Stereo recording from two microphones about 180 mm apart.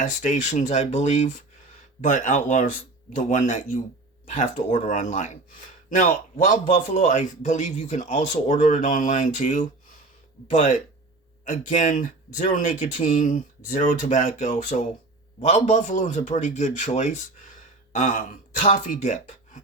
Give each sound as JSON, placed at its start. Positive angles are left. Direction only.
{"t": 0.0, "sound": "a man's voice", "side_deg": 45}